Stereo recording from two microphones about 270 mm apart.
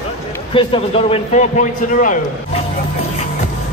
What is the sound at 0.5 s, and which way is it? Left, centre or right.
A man's voice, centre.